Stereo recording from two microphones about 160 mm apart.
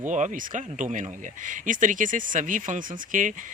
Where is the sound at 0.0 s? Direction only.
50° right (ahead or behind).